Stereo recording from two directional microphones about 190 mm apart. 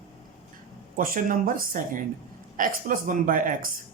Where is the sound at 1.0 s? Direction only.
45° right (ahead or behind).